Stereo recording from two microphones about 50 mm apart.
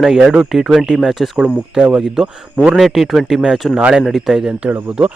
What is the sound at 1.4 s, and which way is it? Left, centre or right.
Speech, right.